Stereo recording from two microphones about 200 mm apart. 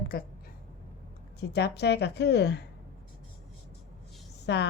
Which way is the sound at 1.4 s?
55° left (ahead or behind).